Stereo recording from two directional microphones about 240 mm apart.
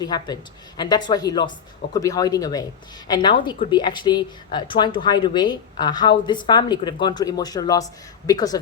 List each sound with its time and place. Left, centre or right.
0.0 s a woman's voice: centre